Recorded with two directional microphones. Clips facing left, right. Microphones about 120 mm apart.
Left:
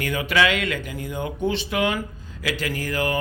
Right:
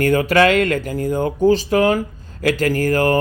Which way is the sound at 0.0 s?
45° right (ahead or behind).